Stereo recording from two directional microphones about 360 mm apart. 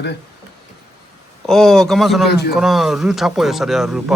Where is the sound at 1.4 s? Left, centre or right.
Centre.